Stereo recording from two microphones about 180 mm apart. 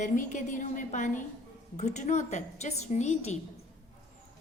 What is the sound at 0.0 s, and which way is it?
A woman's voice, 45° left (ahead or behind).